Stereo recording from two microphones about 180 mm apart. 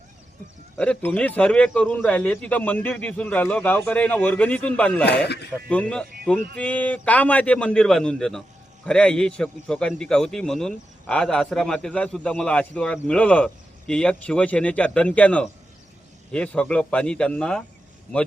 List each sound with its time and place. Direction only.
0.8 s a man's voice: 5° left (ahead or behind)
5.0 s speech: 65° left (ahead or behind)
5.6 s a man's voice: 5° left (ahead or behind)